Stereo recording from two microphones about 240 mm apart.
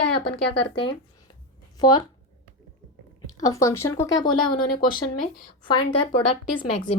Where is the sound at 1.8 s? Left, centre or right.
Centre.